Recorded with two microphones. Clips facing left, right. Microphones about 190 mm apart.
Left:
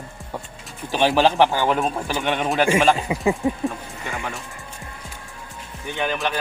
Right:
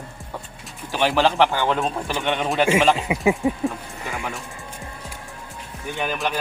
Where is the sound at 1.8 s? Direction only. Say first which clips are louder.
Left 1 dB; centre (ahead or behind).